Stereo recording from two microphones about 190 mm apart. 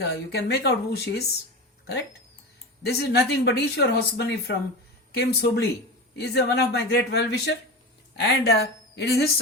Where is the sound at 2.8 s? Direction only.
55° left (ahead or behind).